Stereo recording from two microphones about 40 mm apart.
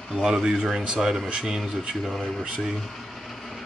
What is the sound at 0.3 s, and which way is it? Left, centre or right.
A man's voice, centre.